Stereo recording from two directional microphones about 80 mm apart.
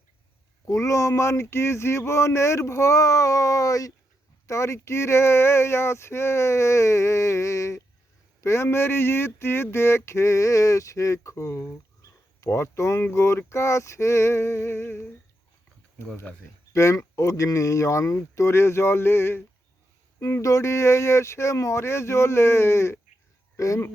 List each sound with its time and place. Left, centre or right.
0.6 s speech: left
16.3 s speech: centre
16.7 s speech: left